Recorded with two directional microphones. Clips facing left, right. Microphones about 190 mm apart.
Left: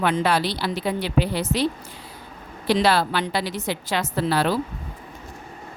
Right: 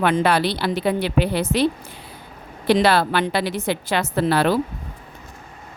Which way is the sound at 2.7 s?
55° right (ahead or behind).